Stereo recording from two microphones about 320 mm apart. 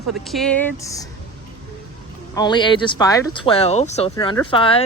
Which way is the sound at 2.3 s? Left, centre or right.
Centre.